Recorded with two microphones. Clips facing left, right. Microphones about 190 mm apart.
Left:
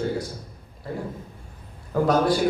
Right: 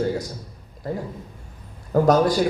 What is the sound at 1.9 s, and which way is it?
Speech, 40° right (ahead or behind).